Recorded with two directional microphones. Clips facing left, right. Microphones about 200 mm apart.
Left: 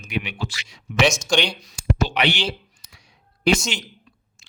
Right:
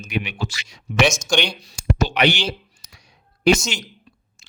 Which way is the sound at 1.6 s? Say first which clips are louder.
Right 1 dB; 35° right (ahead or behind).